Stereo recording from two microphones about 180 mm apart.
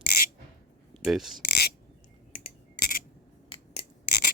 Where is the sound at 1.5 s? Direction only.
60° left (ahead or behind).